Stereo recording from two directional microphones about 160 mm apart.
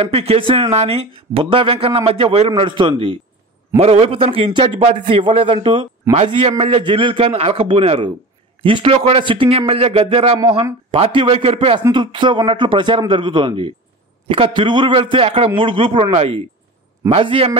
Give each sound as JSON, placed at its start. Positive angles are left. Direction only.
{"t": 0.0, "sound": "a man's voice", "side_deg": -40}